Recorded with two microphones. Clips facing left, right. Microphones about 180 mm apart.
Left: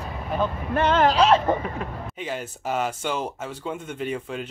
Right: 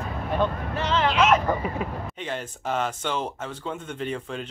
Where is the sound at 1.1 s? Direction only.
30° left (ahead or behind).